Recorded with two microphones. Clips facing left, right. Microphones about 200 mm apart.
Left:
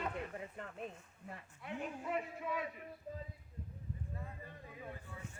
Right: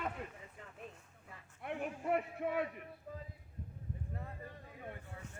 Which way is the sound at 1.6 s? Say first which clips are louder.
Right 4 dB; 60° right (ahead or behind).